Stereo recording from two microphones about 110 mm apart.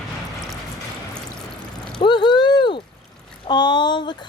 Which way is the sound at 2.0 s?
45° left (ahead or behind).